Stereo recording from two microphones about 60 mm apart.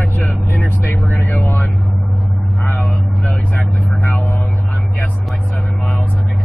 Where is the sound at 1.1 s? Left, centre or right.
Left.